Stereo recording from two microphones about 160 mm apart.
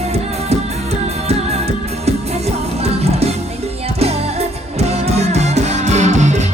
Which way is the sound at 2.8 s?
40° right (ahead or behind).